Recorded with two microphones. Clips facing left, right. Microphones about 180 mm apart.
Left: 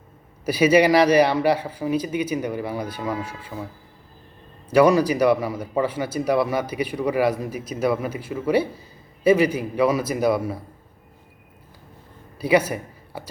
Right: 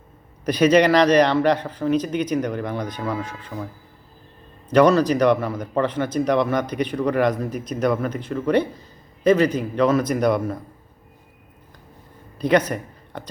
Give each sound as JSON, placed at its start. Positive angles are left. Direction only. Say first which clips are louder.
{"t": 0.4, "sound": "speech", "louder": "right 1 dB", "side_deg": 10}
{"t": 4.7, "sound": "speech", "louder": "right 1 dB", "side_deg": 10}
{"t": 12.4, "sound": "speech", "louder": "right 1 dB", "side_deg": 10}